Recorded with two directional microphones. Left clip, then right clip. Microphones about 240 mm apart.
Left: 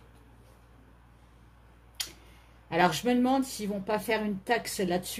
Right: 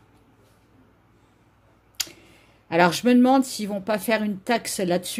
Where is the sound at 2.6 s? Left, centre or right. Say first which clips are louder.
Right 7 dB; right.